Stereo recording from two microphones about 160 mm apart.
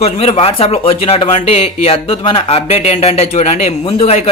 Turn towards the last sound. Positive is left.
turn(degrees=40)  # may be behind; listen again after turning